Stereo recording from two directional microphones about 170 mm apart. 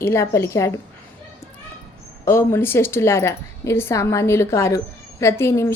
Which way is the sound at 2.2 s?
15° left (ahead or behind).